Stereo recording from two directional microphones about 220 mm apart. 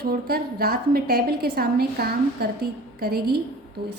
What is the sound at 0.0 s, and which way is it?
A woman's voice, 45° right (ahead or behind).